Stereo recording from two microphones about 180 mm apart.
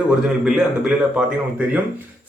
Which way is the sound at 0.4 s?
5° right (ahead or behind).